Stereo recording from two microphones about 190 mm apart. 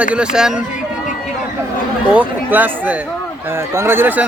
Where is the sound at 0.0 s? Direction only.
5° right (ahead or behind).